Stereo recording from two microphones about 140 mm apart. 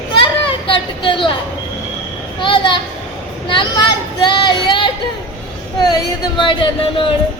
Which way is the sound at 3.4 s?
35° left (ahead or behind).